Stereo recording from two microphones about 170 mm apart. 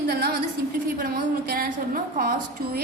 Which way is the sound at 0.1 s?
65° right (ahead or behind).